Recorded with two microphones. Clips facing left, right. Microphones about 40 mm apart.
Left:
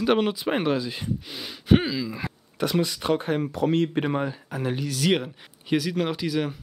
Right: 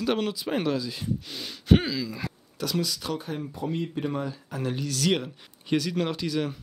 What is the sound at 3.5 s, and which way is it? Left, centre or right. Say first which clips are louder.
Speech: left 8 dB; left.